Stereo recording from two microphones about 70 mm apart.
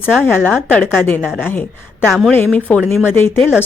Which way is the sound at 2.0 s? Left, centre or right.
Centre.